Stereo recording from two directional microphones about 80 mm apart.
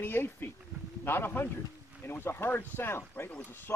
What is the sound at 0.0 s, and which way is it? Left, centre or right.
Speech, left.